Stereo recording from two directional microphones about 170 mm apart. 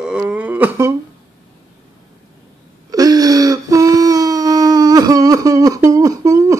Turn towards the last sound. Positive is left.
turn(degrees=-20)  # may be behind; listen again after turning